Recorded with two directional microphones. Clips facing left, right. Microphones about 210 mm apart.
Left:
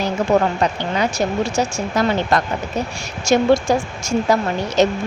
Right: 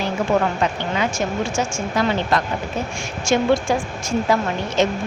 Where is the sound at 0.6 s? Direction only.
40° left (ahead or behind).